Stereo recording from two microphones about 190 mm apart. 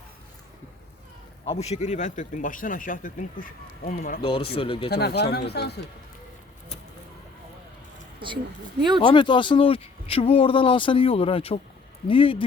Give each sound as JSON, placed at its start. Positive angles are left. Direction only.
{"t": 1.5, "sound": "speech", "side_deg": 35}
{"t": 4.2, "sound": "speech", "side_deg": 25}
{"t": 4.9, "sound": "speech", "side_deg": 60}
{"t": 9.0, "sound": "speech", "side_deg": 25}